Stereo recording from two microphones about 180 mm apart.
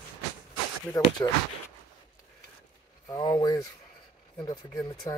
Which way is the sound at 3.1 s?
25° left (ahead or behind).